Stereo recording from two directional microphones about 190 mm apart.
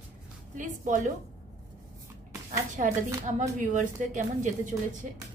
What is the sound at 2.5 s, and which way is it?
A woman's voice, 40° right (ahead or behind).